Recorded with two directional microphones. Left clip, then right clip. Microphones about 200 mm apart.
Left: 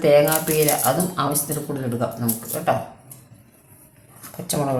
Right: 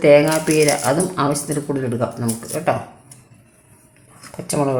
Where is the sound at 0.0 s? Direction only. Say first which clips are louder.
Right 4 dB; 40° right (ahead or behind).